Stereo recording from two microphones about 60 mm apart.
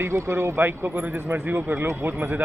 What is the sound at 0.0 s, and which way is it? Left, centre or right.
Speech, right.